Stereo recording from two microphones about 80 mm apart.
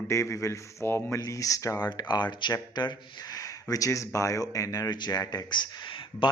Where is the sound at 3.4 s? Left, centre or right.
Left.